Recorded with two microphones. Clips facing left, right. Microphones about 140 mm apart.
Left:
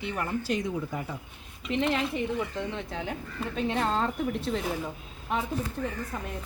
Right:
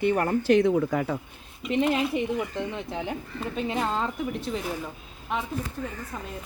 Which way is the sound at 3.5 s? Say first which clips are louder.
Even; 5° right (ahead or behind).